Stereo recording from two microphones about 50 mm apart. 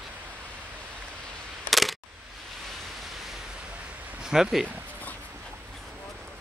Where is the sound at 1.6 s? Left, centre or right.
Centre.